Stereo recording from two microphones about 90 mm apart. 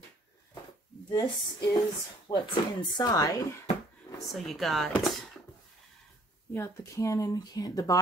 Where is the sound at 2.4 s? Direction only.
50° left (ahead or behind).